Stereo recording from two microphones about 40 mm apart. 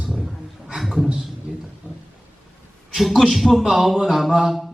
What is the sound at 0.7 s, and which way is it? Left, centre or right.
Speech, centre.